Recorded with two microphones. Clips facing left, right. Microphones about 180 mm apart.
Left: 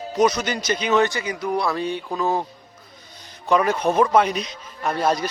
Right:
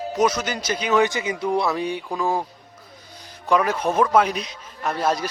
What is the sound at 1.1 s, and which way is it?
A man's voice, 20° right (ahead or behind).